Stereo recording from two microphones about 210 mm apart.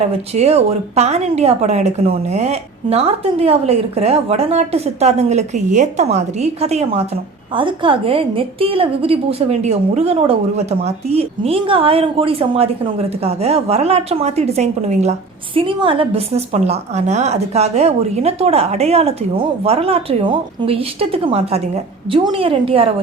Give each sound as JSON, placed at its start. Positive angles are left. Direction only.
{"t": 0.3, "sound": "a woman's voice", "side_deg": -30}